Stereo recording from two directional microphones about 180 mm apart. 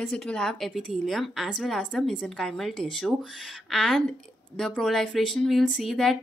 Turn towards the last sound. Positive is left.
turn(degrees=0)  # may be behind; listen again after turning